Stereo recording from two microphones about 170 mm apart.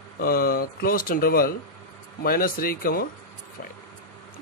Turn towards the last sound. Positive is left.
turn(degrees=60)  # may be behind; listen again after turning